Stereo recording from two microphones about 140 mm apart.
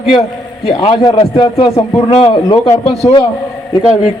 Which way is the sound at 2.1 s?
50° left (ahead or behind).